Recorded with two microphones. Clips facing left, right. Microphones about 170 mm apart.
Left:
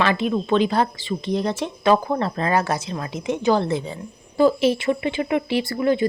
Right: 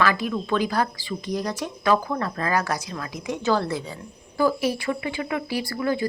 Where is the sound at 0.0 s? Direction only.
25° left (ahead or behind).